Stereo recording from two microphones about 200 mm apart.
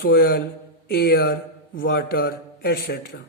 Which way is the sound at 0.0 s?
50° left (ahead or behind).